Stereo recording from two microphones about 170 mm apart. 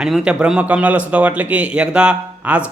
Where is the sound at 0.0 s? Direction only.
5° right (ahead or behind).